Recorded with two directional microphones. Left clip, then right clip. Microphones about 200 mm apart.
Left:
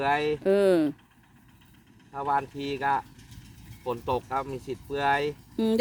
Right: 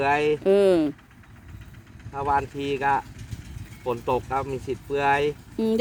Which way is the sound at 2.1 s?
Centre (ahead or behind).